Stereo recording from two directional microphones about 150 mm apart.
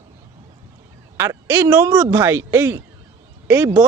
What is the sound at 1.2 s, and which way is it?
A man's voice, 15° right (ahead or behind).